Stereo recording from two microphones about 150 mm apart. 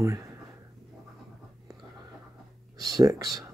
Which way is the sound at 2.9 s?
25° right (ahead or behind).